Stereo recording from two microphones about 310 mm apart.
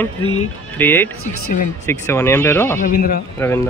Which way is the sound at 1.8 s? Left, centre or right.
Centre.